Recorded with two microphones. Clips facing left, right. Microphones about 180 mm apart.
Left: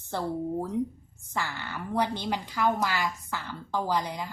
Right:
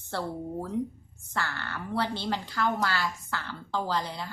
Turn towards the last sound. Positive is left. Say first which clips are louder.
# left 2 dB
turn(degrees=15)  # may be behind; listen again after turning